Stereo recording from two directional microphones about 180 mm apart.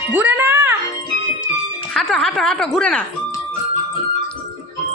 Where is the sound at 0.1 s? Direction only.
10° right (ahead or behind).